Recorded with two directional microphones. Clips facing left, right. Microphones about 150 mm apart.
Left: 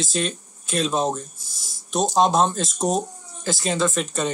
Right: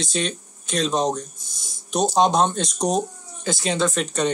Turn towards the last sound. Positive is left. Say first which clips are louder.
# right 1 dB
turn(degrees=0)  # may be behind; listen again after turning